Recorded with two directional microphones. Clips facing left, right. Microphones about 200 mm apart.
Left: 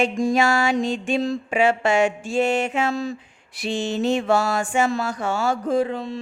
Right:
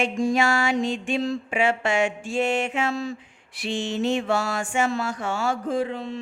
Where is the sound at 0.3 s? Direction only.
40° left (ahead or behind).